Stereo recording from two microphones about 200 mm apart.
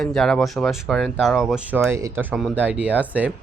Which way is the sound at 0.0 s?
Centre (ahead or behind).